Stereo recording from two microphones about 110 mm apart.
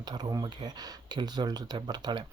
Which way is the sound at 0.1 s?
35° right (ahead or behind).